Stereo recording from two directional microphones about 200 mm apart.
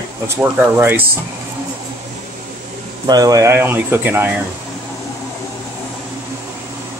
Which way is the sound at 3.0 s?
20° right (ahead or behind).